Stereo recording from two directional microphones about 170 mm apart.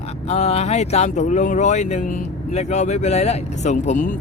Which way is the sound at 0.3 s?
40° left (ahead or behind).